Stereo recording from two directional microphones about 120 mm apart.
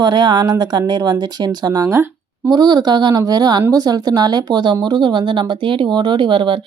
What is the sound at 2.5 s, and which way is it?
Speech, 35° right (ahead or behind).